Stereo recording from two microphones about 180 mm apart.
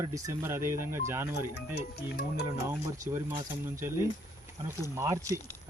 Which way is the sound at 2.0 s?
60° left (ahead or behind).